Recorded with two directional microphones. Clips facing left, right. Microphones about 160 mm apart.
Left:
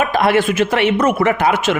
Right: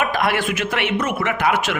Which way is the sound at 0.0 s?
30° left (ahead or behind).